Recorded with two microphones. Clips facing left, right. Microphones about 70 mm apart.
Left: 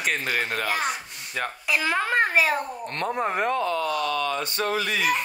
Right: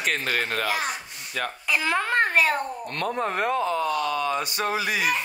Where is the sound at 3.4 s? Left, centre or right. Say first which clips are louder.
Right 1 dB; centre.